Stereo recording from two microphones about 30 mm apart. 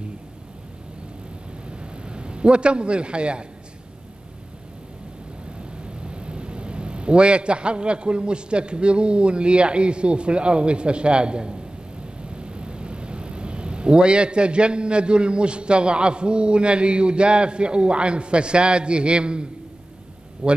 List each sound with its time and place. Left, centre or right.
1.7 s a sound: right
5.6 s a man's voice: right
20.4 s speech: right